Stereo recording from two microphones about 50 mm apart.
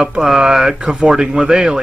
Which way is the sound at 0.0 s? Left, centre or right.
Centre.